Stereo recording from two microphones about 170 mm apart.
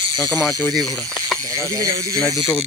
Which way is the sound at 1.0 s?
5° left (ahead or behind).